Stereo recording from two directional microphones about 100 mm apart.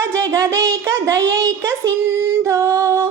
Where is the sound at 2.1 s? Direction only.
30° right (ahead or behind).